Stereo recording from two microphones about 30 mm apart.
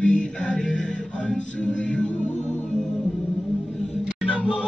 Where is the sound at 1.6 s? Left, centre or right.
Left.